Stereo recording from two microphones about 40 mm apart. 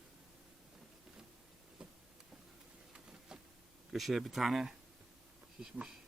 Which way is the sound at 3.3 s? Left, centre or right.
Centre.